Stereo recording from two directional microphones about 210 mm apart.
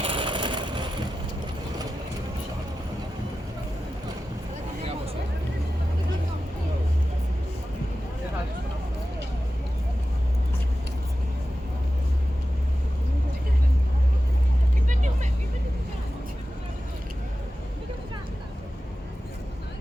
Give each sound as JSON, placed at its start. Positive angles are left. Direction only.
{"t": 0.0, "sound": "vehicle", "side_deg": -25}
{"t": 14.8, "sound": "vehicle", "side_deg": -35}